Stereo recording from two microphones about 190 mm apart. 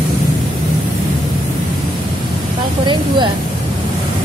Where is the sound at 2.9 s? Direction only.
25° right (ahead or behind).